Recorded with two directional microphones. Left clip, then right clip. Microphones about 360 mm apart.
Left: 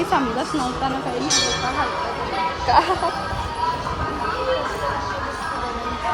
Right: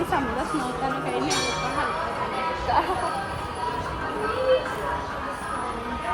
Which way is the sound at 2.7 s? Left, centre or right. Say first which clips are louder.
Left 7 dB; left.